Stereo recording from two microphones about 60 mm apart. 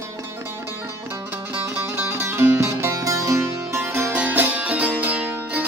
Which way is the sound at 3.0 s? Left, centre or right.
Right.